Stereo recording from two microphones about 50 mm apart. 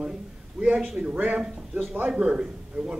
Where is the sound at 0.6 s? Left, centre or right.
Right.